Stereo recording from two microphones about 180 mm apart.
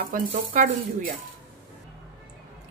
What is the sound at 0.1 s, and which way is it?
Speech, 50° right (ahead or behind).